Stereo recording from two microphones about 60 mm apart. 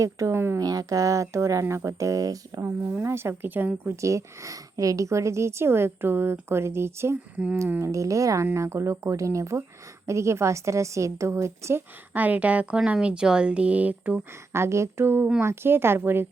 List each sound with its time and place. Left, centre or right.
0.0 s a woman's voice: right
0.3 s a woman's voice: right
0.6 s a woman's voice: right
3.0 s a sound: right
4.0 s a woman's voice: right
6.5 s a sound: right
7.8 s a woman's voice: right
8.5 s a woman's voice: right
12.1 s speech: right
14.5 s a sound: right
15.4 s a woman's voice: right